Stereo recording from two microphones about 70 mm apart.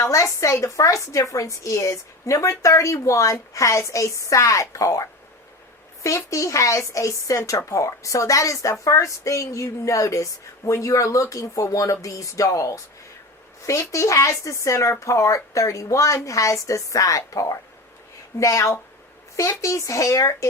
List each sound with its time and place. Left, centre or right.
0.0 s a woman's voice: left